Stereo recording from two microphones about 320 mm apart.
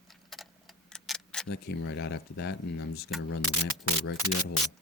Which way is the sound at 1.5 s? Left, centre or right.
Left.